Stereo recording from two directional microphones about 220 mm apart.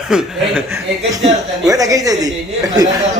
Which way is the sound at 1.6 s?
15° right (ahead or behind).